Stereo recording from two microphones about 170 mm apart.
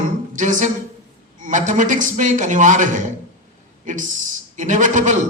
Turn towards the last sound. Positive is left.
turn(degrees=-45)  # may be behind; listen again after turning